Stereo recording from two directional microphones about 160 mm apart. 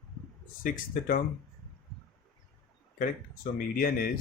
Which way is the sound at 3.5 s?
65° left (ahead or behind).